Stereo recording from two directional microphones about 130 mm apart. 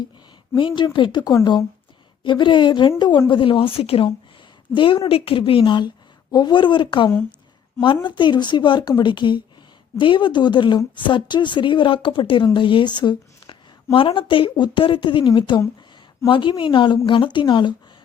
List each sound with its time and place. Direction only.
0.9 s a woman's voice: 35° left (ahead or behind)
7.1 s a woman's voice: 15° left (ahead or behind)
8.0 s a woman's voice: 35° left (ahead or behind)